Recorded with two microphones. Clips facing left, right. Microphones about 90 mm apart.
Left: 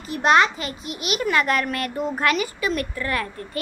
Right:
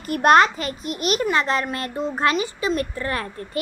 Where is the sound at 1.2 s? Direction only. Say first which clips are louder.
Left 3 dB; 25° right (ahead or behind).